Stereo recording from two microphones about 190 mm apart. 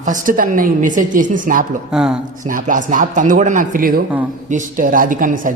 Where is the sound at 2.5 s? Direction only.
45° right (ahead or behind).